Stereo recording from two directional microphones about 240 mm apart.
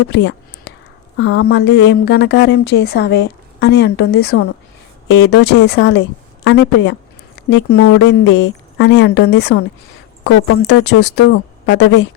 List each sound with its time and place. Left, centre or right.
0.1 s a woman's voice: left